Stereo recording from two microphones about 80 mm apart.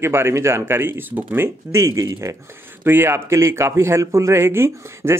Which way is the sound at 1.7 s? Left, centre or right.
Right.